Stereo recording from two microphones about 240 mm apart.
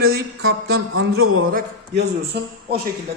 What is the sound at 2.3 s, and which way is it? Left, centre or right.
Speech, right.